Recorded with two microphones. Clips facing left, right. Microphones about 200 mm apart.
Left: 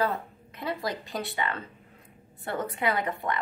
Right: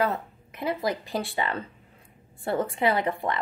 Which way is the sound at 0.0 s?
25° right (ahead or behind).